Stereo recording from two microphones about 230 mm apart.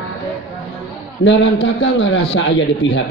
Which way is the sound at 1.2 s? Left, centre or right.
Left.